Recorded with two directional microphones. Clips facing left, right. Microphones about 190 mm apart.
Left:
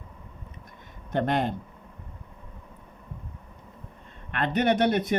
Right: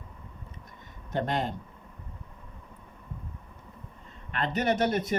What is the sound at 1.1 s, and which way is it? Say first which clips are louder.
Speech: left 4 dB; 55° left (ahead or behind).